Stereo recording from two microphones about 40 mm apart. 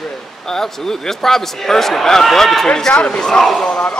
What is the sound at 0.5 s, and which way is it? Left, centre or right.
Speech, centre.